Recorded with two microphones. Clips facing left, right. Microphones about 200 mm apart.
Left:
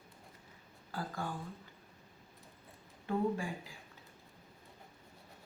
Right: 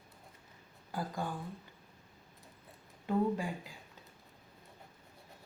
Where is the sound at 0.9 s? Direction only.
15° right (ahead or behind).